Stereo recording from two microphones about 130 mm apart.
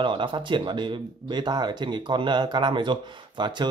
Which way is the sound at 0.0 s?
40° right (ahead or behind).